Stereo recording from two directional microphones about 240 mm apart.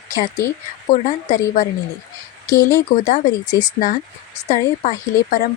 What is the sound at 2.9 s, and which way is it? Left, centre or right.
A woman's voice, left.